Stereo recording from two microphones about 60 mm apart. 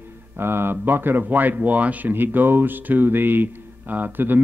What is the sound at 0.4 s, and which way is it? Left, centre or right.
Speech, right.